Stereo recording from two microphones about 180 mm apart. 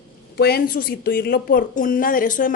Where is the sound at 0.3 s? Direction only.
60° left (ahead or behind).